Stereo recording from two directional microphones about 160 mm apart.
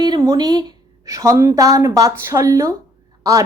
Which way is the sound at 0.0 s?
25° right (ahead or behind).